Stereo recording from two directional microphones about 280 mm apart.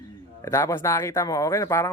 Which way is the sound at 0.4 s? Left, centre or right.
Centre.